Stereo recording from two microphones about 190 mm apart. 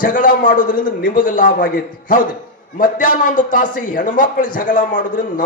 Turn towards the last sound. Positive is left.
turn(degrees=45)  # may be behind; listen again after turning